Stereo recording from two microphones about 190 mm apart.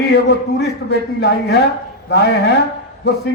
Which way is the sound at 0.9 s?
60° left (ahead or behind).